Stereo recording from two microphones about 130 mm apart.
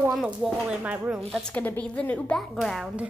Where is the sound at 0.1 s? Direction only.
Centre (ahead or behind).